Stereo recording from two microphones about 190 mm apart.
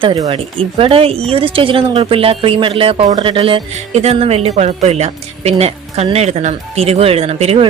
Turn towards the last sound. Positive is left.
turn(degrees=-35)  # may be behind; listen again after turning